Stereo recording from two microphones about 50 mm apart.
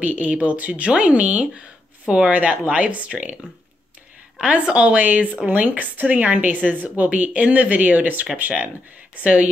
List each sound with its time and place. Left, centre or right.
0.0 s speech: right
4.4 s speech: right